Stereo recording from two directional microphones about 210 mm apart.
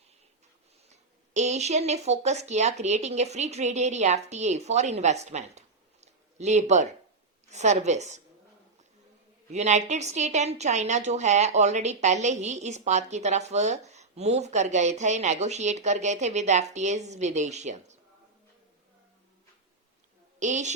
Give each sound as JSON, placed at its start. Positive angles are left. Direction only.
{"t": 0.9, "sound": "a woman's voice", "side_deg": -35}
{"t": 9.5, "sound": "a woman's voice", "side_deg": -35}
{"t": 20.4, "sound": "a woman's voice", "side_deg": -35}